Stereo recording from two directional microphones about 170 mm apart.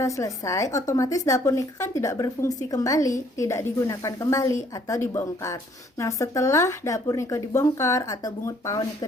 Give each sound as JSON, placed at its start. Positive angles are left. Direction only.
{"t": 0.0, "sound": "a woman's voice", "side_deg": 20}